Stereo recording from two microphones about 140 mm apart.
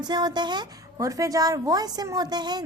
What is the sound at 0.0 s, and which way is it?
A woman's voice, 30° right (ahead or behind).